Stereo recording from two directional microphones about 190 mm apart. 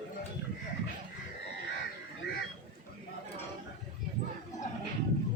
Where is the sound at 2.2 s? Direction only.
60° left (ahead or behind).